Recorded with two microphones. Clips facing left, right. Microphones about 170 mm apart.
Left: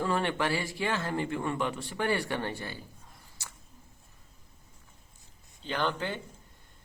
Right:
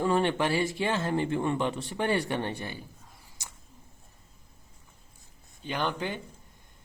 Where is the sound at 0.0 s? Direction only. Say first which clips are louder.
Right 4 dB; 20° right (ahead or behind).